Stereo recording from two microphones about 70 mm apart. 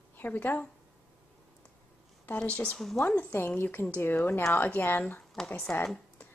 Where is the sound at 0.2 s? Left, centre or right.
Left.